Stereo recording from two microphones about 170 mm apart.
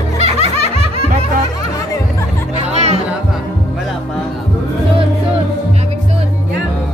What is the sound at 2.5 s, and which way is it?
Music, 40° right (ahead or behind).